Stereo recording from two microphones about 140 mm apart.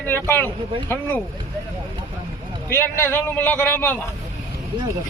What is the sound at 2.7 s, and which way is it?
Speech, 15° left (ahead or behind).